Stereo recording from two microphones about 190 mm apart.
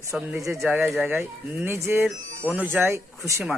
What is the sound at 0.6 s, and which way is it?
Speech, centre (ahead or behind).